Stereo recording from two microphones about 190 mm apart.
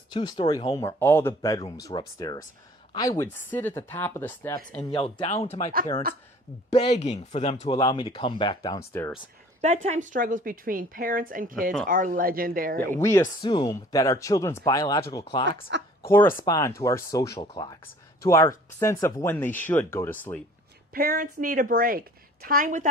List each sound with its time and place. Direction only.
0.1 s speech: 25° left (ahead or behind)
0.8 s speech: 15° left (ahead or behind)
4.8 s speech: 25° left (ahead or behind)
6.7 s speech: 30° left (ahead or behind); by 9.1 s 15° left (ahead or behind)
9.6 s a woman's voice: 40° right (ahead or behind)
12.8 s speech: 15° left (ahead or behind)
15.7 s speech: 65° right (ahead or behind)
16.4 s speech: 20° left (ahead or behind)
20.9 s a woman's voice: 50° right (ahead or behind)